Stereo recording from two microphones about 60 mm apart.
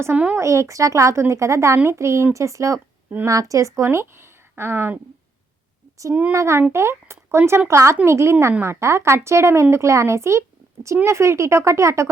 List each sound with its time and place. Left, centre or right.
0.3 s a woman's voice: right
3.8 s speech: right
6.3 s speech: right